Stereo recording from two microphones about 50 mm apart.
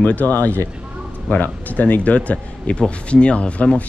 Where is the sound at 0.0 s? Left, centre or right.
Left.